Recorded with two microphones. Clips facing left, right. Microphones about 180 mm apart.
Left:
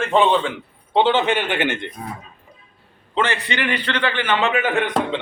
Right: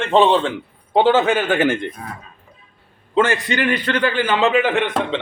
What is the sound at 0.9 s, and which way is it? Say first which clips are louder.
Speech: right 3 dB; 40° right (ahead or behind).